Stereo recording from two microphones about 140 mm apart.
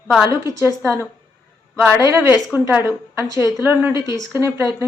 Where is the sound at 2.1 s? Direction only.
15° right (ahead or behind).